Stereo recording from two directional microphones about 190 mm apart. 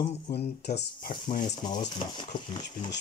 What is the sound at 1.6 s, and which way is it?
Speech, 25° left (ahead or behind).